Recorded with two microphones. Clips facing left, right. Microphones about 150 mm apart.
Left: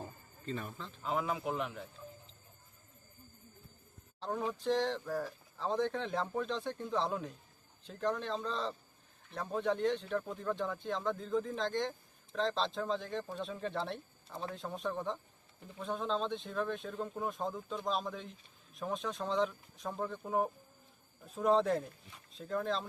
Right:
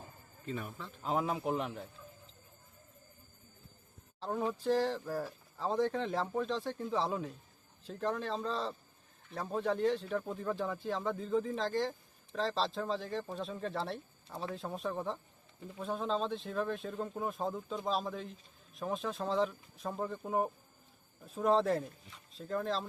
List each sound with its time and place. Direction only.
0.4 s speech: 10° right (ahead or behind)
1.0 s a man's voice: 40° right (ahead or behind)
4.2 s speech: 5° right (ahead or behind)